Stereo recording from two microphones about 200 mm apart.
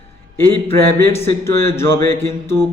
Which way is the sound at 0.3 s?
10° left (ahead or behind).